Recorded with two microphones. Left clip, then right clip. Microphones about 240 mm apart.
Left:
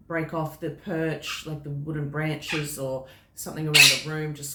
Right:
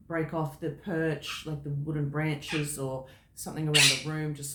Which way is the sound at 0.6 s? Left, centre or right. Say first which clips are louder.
Left 2 dB; centre.